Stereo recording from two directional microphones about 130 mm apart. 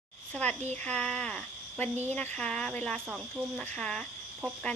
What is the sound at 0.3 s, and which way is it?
A child's voice, 10° left (ahead or behind).